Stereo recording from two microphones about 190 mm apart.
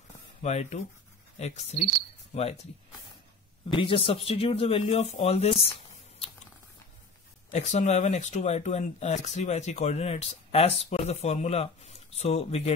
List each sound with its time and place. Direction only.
0.4 s speech: 35° left (ahead or behind)
3.7 s speech: 30° left (ahead or behind)
7.5 s speech: 40° left (ahead or behind)